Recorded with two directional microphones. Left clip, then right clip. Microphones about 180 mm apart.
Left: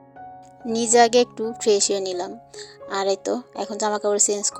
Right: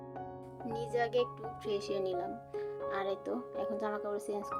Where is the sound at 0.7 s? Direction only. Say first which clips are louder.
Left 17 dB; 40° left (ahead or behind).